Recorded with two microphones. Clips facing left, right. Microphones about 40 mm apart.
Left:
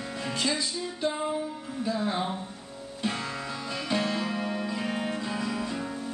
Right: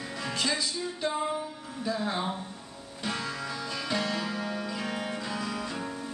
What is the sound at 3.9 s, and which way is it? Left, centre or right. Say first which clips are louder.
Music: left 3 dB; left.